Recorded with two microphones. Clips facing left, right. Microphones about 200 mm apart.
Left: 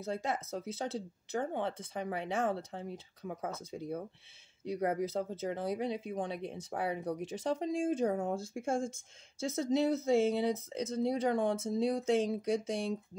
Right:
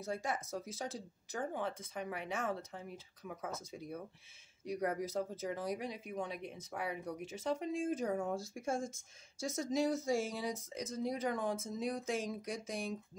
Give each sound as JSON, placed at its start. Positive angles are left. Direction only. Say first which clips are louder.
{"t": 0.0, "sound": "speech", "louder": "left 3 dB", "side_deg": 25}